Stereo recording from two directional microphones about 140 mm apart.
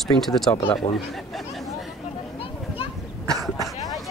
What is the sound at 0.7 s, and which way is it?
Chatter, centre (ahead or behind).